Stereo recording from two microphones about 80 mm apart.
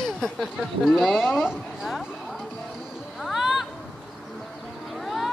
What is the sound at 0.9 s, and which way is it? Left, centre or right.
A woman's voice, centre.